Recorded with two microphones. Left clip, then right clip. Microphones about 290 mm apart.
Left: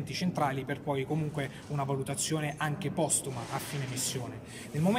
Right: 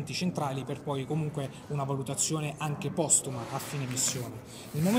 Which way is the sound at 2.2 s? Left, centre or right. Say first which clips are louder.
Even; left.